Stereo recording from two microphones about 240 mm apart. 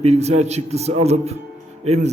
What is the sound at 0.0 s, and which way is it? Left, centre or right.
A man's voice, right.